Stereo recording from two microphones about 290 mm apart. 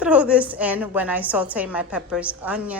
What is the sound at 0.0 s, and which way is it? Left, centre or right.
A woman's voice, centre.